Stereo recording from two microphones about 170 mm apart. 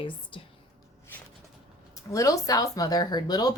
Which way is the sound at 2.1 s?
20° left (ahead or behind).